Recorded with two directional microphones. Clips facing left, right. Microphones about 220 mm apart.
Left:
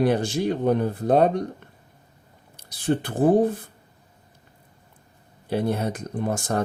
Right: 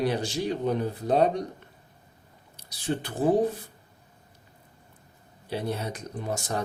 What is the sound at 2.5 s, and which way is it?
Speech, 55° left (ahead or behind).